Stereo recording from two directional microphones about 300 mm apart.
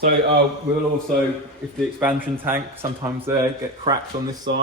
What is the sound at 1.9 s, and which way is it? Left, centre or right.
Speech, centre.